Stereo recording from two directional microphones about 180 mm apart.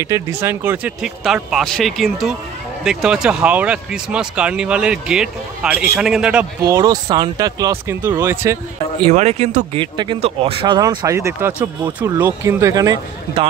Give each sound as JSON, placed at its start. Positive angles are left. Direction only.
{"t": 0.0, "sound": "speech", "side_deg": -15}
{"t": 6.6, "sound": "speech", "side_deg": -20}
{"t": 9.1, "sound": "speech", "side_deg": -35}